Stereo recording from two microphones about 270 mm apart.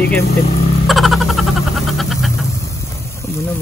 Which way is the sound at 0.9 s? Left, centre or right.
Centre.